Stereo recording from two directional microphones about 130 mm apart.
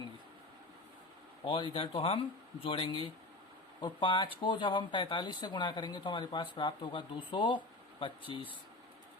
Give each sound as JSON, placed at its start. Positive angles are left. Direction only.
{"t": 1.5, "sound": "speech", "side_deg": 40}